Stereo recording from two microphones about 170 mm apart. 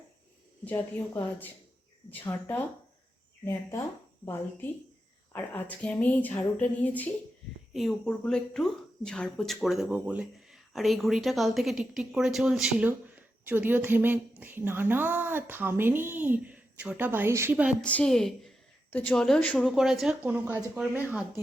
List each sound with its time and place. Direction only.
0.6 s speech: 10° left (ahead or behind)
5.3 s a woman's voice: 10° left (ahead or behind); by 17.8 s 5° right (ahead or behind)
17.8 s a woman's voice: 5° left (ahead or behind)